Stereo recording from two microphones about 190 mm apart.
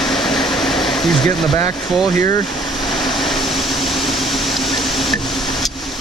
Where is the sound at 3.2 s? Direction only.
Centre (ahead or behind).